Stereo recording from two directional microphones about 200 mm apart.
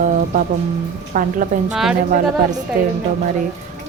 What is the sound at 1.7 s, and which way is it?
Speech, centre (ahead or behind).